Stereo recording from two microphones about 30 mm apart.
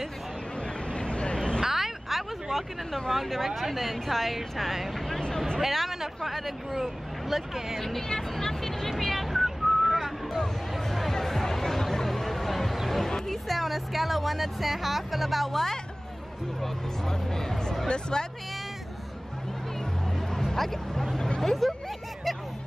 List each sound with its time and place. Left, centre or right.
0.9 s hubbub: left
1.6 s a sound: centre
2.5 s a woman's voice: centre
8.1 s whistling: centre
10.8 s music: centre
12.8 s a sound: centre
13.3 s speech: centre
15.5 s speech: centre
17.1 s speech: centre
17.8 s speech: left
20.3 s hubbub: centre
21.4 s speech: centre